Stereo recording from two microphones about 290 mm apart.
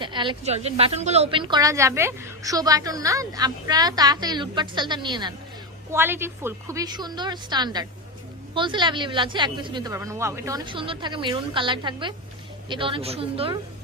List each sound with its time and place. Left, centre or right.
0.0 s a woman's voice: centre